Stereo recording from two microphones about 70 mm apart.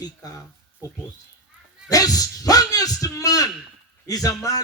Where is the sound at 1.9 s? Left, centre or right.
Left.